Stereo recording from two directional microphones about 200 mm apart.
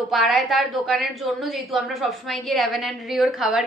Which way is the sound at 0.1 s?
Centre (ahead or behind).